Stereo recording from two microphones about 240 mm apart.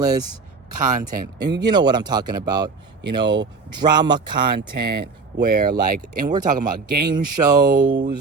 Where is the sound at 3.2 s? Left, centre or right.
Right.